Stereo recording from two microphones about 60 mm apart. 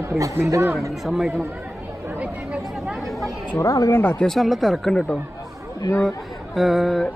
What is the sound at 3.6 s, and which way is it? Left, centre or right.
Speech, left.